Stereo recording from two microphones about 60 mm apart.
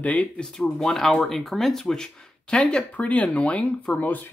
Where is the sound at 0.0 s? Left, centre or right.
Left.